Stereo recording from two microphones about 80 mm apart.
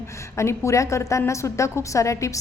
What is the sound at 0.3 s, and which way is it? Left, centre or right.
A woman's voice, left.